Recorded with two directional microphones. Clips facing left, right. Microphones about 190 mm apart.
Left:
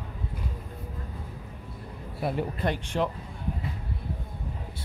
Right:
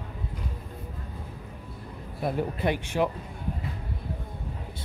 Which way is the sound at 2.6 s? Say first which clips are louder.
Right 2 dB; 10° right (ahead or behind).